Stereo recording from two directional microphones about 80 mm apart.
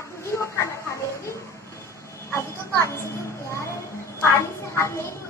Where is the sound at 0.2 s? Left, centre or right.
Left.